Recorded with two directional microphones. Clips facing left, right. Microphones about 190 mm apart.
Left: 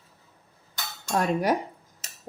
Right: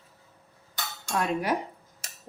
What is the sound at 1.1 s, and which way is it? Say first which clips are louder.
Cutlery: left 4 dB; 40° left (ahead or behind).